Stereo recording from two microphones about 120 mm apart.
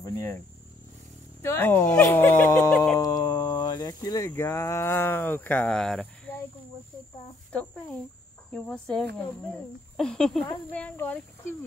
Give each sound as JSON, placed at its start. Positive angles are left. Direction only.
{"t": 0.0, "sound": "cricket", "side_deg": 25}
{"t": 1.4, "sound": "speech", "side_deg": 20}
{"t": 2.0, "sound": "a sound", "side_deg": 15}
{"t": 4.3, "sound": "speech", "side_deg": 20}
{"t": 7.5, "sound": "speech", "side_deg": 10}